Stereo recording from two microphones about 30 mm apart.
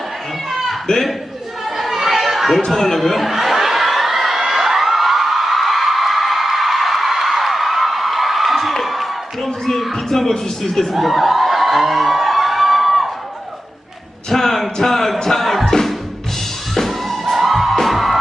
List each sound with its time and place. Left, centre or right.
0.9 s a man's voice: left
1.8 s chatter: centre
2.7 s speech: centre
3.2 s crowd: centre
9.6 s music: centre
10.9 s a sound: centre
14.3 s a sound: centre
15.2 s music: centre
15.6 s music: centre
17.3 s music: centre